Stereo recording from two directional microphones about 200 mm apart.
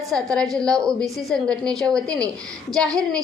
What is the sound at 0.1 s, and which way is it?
A woman's voice, 5° left (ahead or behind).